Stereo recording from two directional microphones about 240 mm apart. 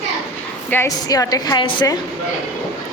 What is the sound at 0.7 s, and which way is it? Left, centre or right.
A woman's voice, centre.